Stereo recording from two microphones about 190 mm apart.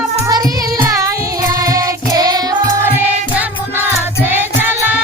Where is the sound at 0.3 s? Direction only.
20° right (ahead or behind).